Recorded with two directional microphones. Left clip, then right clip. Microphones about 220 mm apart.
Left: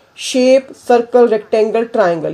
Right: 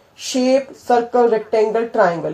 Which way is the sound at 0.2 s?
45° left (ahead or behind).